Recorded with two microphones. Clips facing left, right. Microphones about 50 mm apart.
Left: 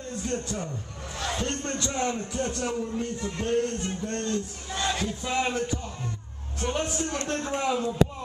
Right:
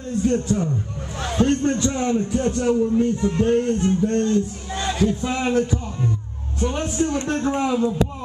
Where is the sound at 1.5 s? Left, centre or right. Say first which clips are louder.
Right 10 dB; centre.